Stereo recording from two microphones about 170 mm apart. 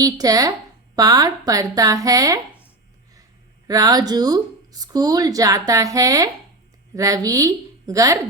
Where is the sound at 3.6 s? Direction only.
20° right (ahead or behind).